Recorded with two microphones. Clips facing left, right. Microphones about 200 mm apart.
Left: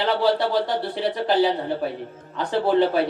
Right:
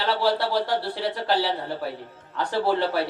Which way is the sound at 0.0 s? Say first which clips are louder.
Left 3 dB; 20° left (ahead or behind).